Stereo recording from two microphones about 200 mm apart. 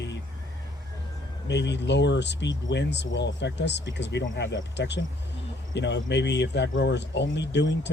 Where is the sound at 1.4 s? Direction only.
60° left (ahead or behind).